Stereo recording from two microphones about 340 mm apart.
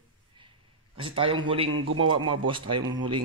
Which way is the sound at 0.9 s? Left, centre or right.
Centre.